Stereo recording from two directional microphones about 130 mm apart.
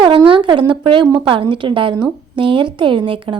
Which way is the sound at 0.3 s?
40° right (ahead or behind).